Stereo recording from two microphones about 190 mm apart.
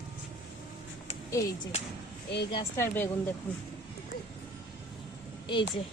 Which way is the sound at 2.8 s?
15° left (ahead or behind).